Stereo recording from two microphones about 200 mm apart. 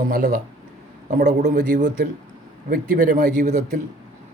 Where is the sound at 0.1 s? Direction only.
45° right (ahead or behind).